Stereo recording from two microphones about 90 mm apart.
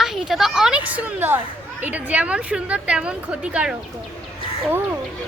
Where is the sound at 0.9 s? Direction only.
20° right (ahead or behind).